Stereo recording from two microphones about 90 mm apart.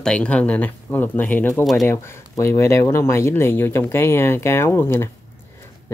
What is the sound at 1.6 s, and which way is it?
Speech, centre (ahead or behind).